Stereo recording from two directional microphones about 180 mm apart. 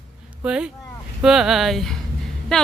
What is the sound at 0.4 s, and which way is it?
Speech, 5° right (ahead or behind).